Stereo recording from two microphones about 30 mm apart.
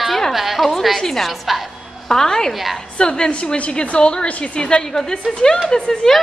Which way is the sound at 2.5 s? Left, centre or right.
Centre.